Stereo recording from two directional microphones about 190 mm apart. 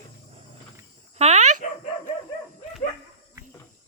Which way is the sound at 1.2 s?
35° right (ahead or behind).